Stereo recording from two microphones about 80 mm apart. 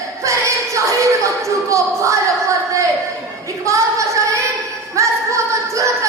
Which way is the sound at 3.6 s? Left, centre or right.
Right.